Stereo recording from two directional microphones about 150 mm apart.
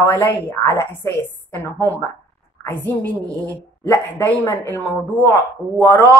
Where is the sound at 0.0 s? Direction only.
15° left (ahead or behind).